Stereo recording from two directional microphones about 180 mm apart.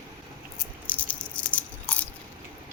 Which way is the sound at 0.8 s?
10° left (ahead or behind).